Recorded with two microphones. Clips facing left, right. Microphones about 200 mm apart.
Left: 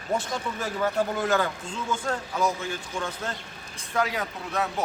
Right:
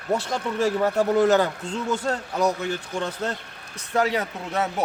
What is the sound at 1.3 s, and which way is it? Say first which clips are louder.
Speech: right 6 dB; 40° right (ahead or behind).